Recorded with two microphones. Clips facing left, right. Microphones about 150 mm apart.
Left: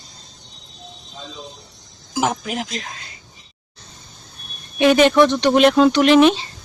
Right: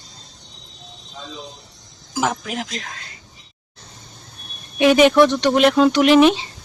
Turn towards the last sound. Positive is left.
turn(degrees=-10)  # may be behind; listen again after turning